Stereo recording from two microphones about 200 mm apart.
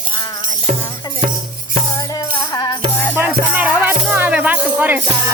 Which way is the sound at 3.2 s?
10° right (ahead or behind).